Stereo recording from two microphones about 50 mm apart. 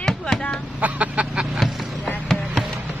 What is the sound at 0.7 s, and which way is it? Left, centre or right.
Chicken, right.